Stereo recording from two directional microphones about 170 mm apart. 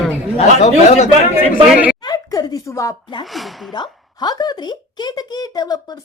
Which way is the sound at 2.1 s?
20° left (ahead or behind).